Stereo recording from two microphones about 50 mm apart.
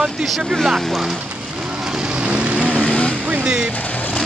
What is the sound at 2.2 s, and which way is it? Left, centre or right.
Vehicle, right.